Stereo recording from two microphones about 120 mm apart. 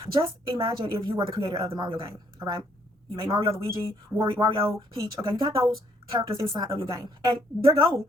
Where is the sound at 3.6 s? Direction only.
20° right (ahead or behind).